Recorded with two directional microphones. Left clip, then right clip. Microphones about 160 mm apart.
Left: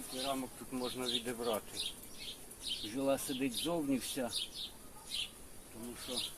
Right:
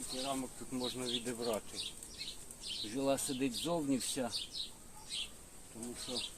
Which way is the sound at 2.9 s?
40° right (ahead or behind).